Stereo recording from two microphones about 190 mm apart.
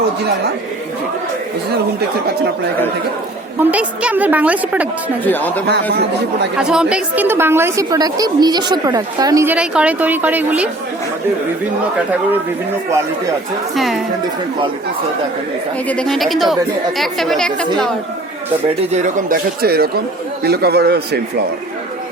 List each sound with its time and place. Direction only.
3.6 s a woman's voice: 5° right (ahead or behind)
5.2 s speech: 10° left (ahead or behind)
5.6 s a man's voice: 60° right (ahead or behind)
6.6 s a woman's voice: 5° right (ahead or behind)
13.7 s speech: centre (ahead or behind)
15.9 s speech: 5° left (ahead or behind)
18.9 s a man's voice: 40° right (ahead or behind); by 21.4 s 60° right (ahead or behind)